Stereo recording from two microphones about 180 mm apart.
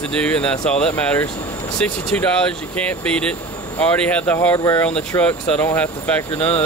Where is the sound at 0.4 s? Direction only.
5° left (ahead or behind).